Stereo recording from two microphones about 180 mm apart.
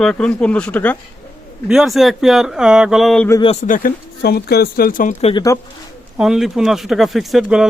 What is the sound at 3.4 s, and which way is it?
Speech, 35° left (ahead or behind).